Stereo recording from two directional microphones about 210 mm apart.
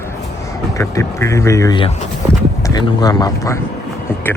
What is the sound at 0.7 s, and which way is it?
Speech, 15° left (ahead or behind).